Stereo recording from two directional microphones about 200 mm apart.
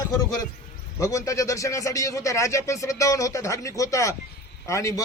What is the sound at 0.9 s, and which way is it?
A man's voice, 15° left (ahead or behind).